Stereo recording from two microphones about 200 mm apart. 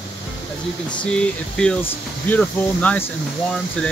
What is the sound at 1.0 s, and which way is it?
Speech, 5° left (ahead or behind).